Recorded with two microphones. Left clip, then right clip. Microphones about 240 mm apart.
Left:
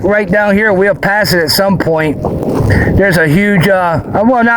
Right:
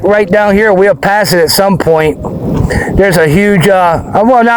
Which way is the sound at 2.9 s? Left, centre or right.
Right.